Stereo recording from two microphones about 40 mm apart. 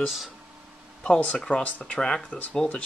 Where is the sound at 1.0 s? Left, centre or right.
Left.